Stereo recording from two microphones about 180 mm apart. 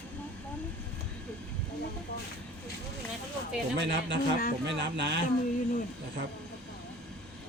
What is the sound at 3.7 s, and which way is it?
Speech, 80° right.